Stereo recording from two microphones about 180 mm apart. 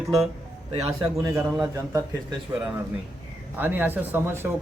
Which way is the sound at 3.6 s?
10° right (ahead or behind).